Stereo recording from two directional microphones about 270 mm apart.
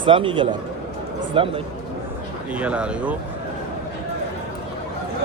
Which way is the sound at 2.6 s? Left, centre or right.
Centre.